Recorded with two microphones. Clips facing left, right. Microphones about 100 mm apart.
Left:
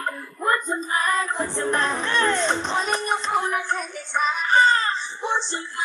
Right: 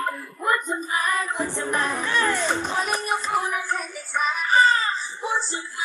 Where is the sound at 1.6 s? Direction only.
10° right (ahead or behind).